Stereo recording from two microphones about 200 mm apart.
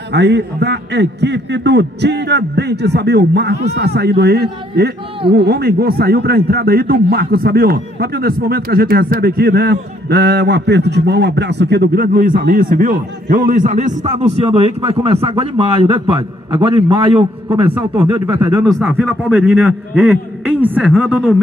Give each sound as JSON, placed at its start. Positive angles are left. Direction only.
{"t": 0.1, "sound": "a man's voice", "side_deg": -60}
{"t": 17.7, "sound": "speech", "side_deg": -10}
{"t": 18.9, "sound": "a man's voice", "side_deg": 0}